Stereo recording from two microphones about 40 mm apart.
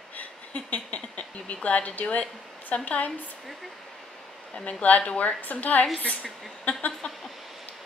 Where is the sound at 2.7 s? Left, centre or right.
Left.